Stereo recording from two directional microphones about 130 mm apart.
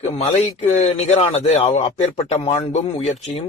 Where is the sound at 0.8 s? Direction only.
60° left (ahead or behind).